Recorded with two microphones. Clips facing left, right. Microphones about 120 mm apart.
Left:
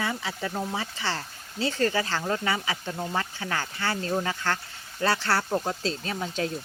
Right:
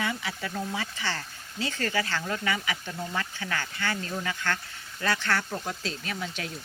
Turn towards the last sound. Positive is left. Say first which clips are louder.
# left 5 dB
turn(degrees=35)  # may be behind; listen again after turning